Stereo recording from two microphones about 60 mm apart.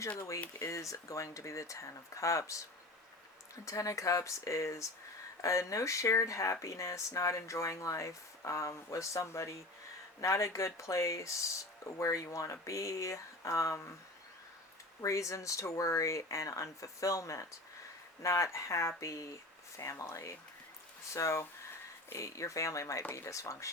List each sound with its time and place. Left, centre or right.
0.6 s speech: left
15.0 s speech: left